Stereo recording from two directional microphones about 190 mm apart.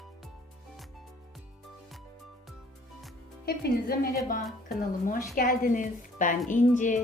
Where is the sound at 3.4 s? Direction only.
55° left (ahead or behind).